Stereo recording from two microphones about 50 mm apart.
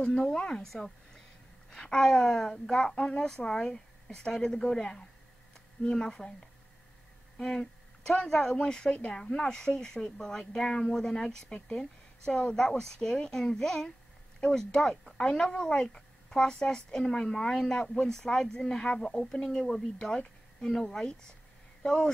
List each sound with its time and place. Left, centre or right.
0.0 s a woman's voice: centre
7.3 s speech: centre
12.3 s speech: left
12.8 s speech: centre